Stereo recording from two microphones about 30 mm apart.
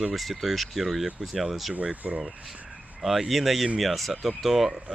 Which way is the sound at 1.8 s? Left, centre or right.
Right.